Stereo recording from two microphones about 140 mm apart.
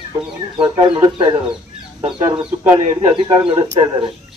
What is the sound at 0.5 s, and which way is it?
Speech, 35° right (ahead or behind).